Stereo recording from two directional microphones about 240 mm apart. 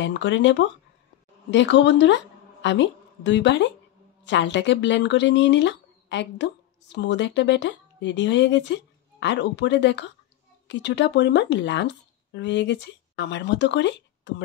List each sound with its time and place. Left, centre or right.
0.0 s a woman's voice: left